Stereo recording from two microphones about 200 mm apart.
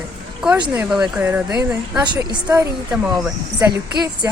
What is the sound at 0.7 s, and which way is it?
A woman's voice, 10° right (ahead or behind).